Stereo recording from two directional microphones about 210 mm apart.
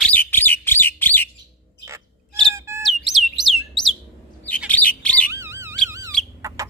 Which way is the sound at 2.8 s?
Centre (ahead or behind).